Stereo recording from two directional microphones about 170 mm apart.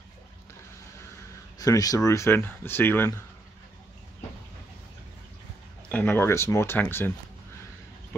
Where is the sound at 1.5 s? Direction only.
20° left (ahead or behind).